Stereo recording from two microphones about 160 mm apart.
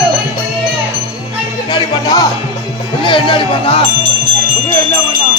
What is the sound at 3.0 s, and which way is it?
Speech, 30° left (ahead or behind).